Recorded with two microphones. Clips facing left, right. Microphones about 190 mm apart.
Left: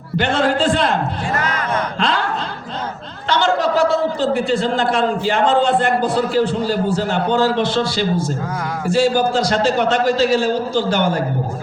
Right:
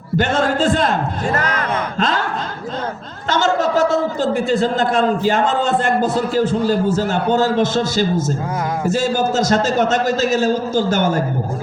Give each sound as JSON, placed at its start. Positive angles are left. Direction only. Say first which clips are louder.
{"t": 0.2, "sound": "a man's voice", "louder": "even", "side_deg": -45}
{"t": 3.2, "sound": "a man's voice", "louder": "even", "side_deg": -45}